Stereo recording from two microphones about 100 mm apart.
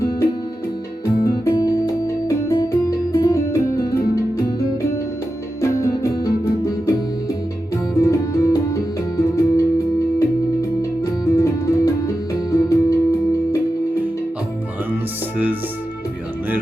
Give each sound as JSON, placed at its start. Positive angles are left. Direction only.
{"t": 1.0, "sound": "music", "side_deg": 30}
{"t": 5.6, "sound": "music", "side_deg": 30}
{"t": 7.9, "sound": "music", "side_deg": 30}